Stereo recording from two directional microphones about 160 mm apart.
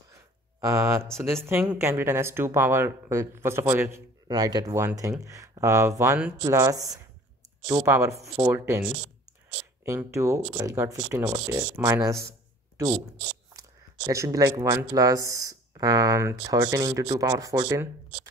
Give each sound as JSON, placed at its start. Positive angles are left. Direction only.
{"t": 0.6, "sound": "speech", "side_deg": -20}
{"t": 9.8, "sound": "speech", "side_deg": -15}
{"t": 13.5, "sound": "speech", "side_deg": -20}